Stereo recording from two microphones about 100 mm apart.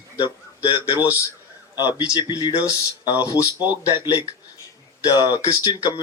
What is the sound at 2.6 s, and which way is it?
Speech, 35° left (ahead or behind).